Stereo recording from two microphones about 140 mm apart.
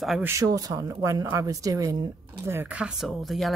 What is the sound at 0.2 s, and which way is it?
Speech, 20° right (ahead or behind).